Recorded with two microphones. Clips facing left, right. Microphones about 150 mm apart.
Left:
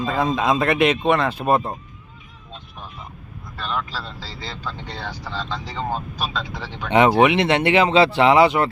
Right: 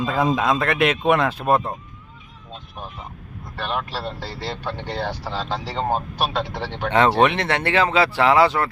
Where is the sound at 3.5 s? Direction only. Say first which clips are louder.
Right 1 dB; 65° right (ahead or behind).